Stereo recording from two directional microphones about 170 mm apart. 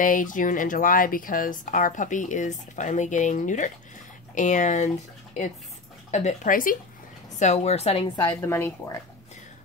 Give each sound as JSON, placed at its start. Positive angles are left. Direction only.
{"t": 0.0, "sound": "speech", "side_deg": 50}
{"t": 6.1, "sound": "speech", "side_deg": 45}
{"t": 7.3, "sound": "a woman's voice", "side_deg": 40}
{"t": 8.3, "sound": "a woman's voice", "side_deg": 15}